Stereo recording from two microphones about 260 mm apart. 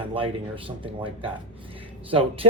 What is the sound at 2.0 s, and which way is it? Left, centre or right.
Speech, right.